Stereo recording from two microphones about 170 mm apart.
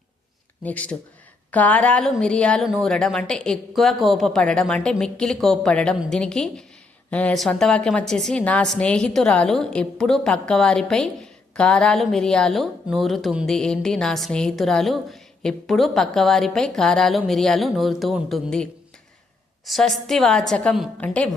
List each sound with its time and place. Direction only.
0.6 s a woman's voice: 10° left (ahead or behind)